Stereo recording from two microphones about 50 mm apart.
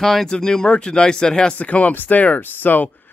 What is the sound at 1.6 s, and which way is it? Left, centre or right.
Speech, left.